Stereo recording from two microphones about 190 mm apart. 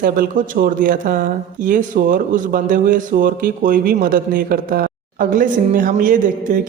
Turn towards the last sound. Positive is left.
turn(degrees=-45)  # may be behind; listen again after turning